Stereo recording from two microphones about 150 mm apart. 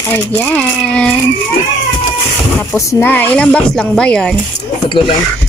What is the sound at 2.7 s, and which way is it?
Speech, 15° left (ahead or behind).